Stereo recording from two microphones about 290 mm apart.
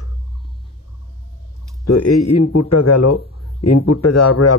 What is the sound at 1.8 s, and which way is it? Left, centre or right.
Speech, left.